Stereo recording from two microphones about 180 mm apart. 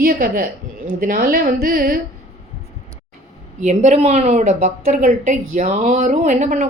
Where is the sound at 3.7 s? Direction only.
40° right (ahead or behind).